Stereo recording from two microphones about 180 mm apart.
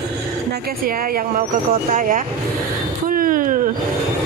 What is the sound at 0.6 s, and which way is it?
A woman's voice, 50° right (ahead or behind).